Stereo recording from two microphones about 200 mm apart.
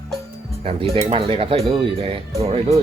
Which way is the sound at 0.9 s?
30° right (ahead or behind).